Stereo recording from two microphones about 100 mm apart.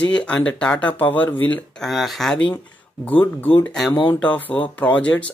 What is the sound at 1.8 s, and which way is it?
Speech, centre (ahead or behind).